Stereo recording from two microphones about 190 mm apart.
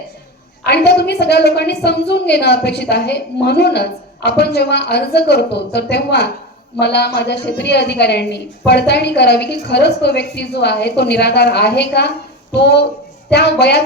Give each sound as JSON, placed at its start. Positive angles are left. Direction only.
{"t": 0.6, "sound": "a woman's voice", "side_deg": 60}